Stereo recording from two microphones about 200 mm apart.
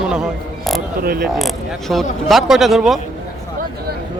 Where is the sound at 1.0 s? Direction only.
50° right (ahead or behind).